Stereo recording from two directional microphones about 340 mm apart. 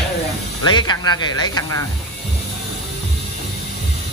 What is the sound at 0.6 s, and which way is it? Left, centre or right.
Speech, centre.